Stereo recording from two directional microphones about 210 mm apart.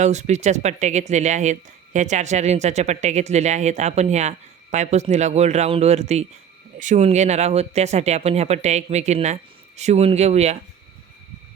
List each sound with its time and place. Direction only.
0.0 s speech: 35° right (ahead or behind)